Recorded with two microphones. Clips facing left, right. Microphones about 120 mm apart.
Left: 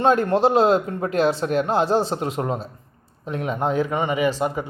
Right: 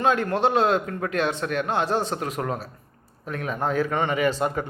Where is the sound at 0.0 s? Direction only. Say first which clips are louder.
Left 4 dB; 35° left (ahead or behind).